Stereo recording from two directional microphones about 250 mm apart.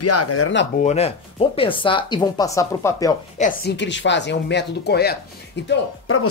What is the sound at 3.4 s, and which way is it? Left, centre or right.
Speech, left.